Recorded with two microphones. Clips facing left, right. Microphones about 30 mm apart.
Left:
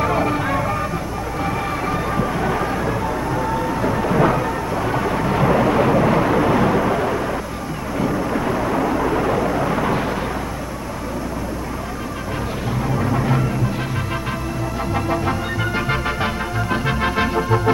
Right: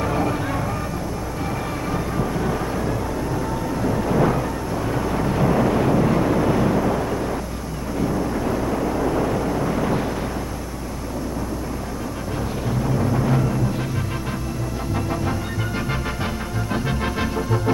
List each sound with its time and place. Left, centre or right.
0.0 s music: left
1.9 s train: left
3.3 s thunder: left
8.0 s vehicle: left
12.8 s music: left
16.7 s organ: left